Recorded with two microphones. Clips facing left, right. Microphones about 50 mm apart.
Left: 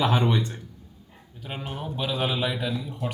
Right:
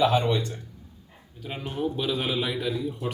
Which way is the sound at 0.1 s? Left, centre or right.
Centre.